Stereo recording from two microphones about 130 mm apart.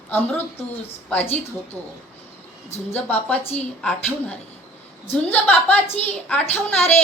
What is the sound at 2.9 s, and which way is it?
A woman's voice, 15° left (ahead or behind).